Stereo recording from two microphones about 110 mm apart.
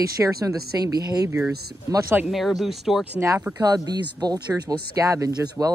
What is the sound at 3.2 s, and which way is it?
Speech, 25° right (ahead or behind).